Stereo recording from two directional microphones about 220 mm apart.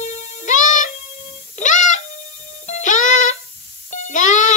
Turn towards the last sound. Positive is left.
turn(degrees=35)  # may be behind; listen again after turning